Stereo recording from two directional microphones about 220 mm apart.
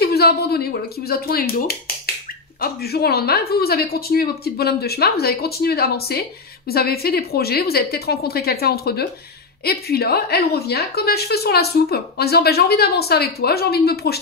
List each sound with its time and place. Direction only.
0.0 s a woman's voice: 45° left (ahead or behind)